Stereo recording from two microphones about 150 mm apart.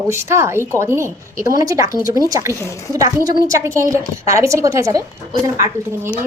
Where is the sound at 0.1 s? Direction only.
15° right (ahead or behind).